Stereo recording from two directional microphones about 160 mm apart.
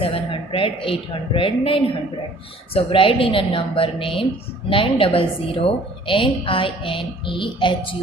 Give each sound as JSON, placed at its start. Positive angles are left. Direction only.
{"t": 0.0, "sound": "a woman's voice", "side_deg": 35}